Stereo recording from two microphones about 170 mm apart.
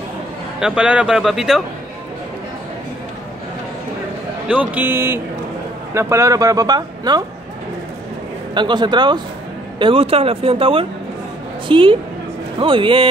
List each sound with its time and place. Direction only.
0.6 s speech: 5° right (ahead or behind)
4.5 s speech: 10° right (ahead or behind)
8.5 s a man's voice: 25° right (ahead or behind)